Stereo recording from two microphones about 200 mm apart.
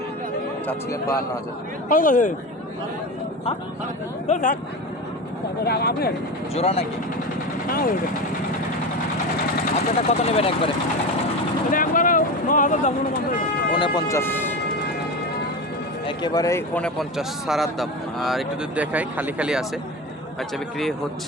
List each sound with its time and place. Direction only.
1.9 s speech: 40° left (ahead or behind)
4.3 s speech: 40° left (ahead or behind)
5.6 s speech: 50° left (ahead or behind)
6.5 s speech: 30° left (ahead or behind)
7.7 s speech: 45° left (ahead or behind)
9.9 s speech: 30° left (ahead or behind)
11.7 s speech: 45° left (ahead or behind)
13.7 s speech: 20° left (ahead or behind)
16.0 s speech: 20° left (ahead or behind); by 19.6 s 5° right (ahead or behind)